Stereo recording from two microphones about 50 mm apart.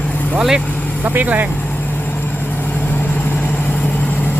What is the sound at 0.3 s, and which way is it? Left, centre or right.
Speech, centre.